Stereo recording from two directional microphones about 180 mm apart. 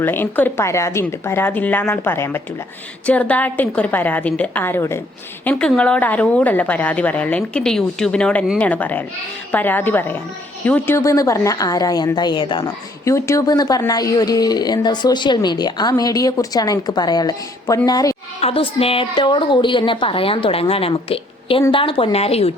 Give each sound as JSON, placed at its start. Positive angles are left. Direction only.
{"t": 0.0, "sound": "a woman's voice", "side_deg": 10}
{"t": 18.3, "sound": "a woman's voice", "side_deg": 30}